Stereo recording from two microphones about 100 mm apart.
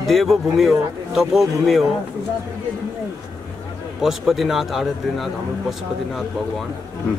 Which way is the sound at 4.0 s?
Centre (ahead or behind).